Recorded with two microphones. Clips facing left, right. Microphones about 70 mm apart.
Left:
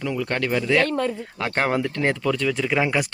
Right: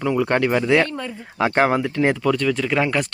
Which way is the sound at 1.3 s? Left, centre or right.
Centre.